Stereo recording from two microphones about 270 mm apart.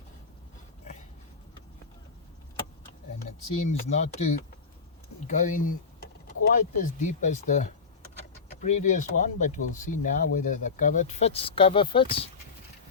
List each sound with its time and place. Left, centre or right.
3.7 s speech: left
8.8 s speech: left